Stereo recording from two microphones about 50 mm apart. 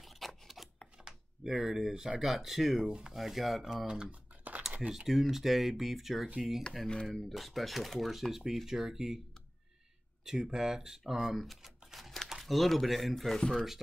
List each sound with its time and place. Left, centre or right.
0.0 s scissors: centre
0.9 s a sound: centre
2.0 s speech: centre
3.7 s typing: centre
4.8 s speech: centre
6.9 s speech: centre
7.2 s speech: centre
10.2 s speech: centre
11.8 s crumpling: centre
12.3 s speech: centre